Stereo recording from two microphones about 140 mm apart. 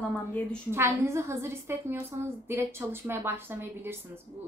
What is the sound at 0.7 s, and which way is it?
A woman's voice, 15° right (ahead or behind).